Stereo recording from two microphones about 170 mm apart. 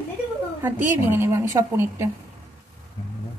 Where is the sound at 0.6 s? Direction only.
15° right (ahead or behind).